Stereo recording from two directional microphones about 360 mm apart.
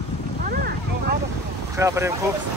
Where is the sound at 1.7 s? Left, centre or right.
Centre.